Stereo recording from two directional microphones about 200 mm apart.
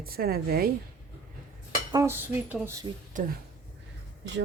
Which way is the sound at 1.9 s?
15° right (ahead or behind).